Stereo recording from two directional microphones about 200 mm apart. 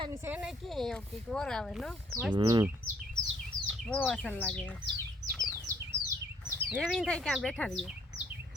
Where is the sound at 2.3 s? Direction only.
20° right (ahead or behind).